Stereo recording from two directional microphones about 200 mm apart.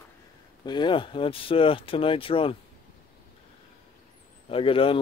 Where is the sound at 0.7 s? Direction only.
25° left (ahead or behind).